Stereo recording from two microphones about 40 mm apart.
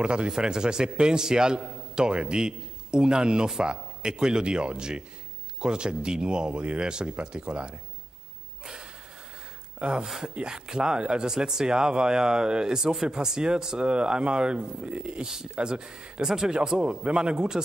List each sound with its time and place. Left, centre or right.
0.0 s a man's voice: right
9.8 s a man's voice: right
15.2 s a man's voice: centre